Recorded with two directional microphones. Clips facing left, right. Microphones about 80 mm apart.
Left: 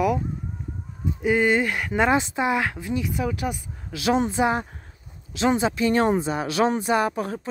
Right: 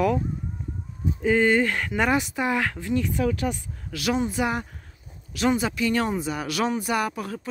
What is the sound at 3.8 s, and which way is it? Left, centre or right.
Speech, left.